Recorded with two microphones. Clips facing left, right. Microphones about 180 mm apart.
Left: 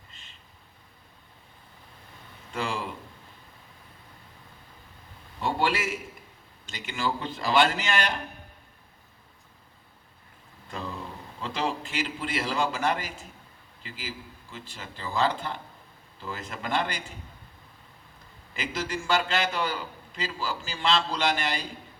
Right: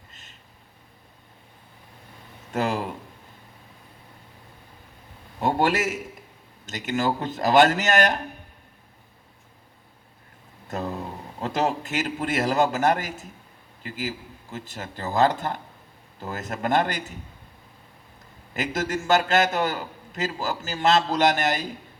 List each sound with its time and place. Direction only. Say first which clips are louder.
0.1 s a sound: right 3 dB; 45° right (ahead or behind)
2.5 s a man's voice: right 6 dB; 45° right (ahead or behind)
5.4 s a man's voice: right 5 dB; 45° right (ahead or behind)
10.7 s a man's voice: right 6 dB; 45° right (ahead or behind)
18.5 s a man's voice: right 5 dB; 45° right (ahead or behind)